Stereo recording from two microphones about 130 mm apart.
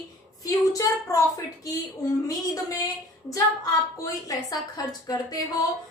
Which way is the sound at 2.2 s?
25° left (ahead or behind).